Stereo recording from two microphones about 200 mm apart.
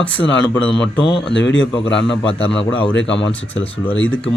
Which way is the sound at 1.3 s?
70° left (ahead or behind).